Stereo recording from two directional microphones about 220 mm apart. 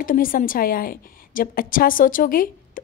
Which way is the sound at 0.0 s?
40° left (ahead or behind).